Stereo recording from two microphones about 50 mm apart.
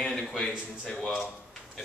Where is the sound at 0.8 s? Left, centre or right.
Left.